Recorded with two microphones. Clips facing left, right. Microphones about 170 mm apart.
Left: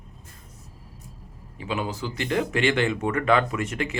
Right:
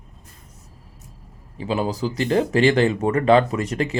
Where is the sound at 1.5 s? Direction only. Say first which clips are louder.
Right 6 dB; 35° right (ahead or behind).